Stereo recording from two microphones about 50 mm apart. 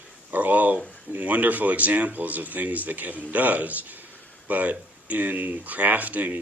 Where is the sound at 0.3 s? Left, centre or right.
Right.